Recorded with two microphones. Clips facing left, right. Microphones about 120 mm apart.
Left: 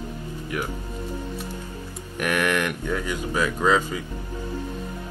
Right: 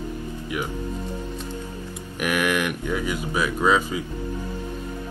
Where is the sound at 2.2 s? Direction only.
10° right (ahead or behind).